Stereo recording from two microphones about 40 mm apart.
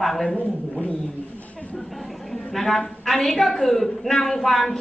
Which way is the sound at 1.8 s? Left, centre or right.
Centre.